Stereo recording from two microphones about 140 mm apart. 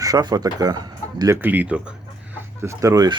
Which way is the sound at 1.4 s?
10° right (ahead or behind).